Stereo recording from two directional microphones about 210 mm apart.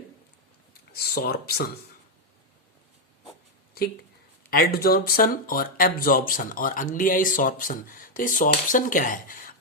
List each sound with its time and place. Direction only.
0.9 s speech: 45° left (ahead or behind)
4.5 s speech: 45° left (ahead or behind)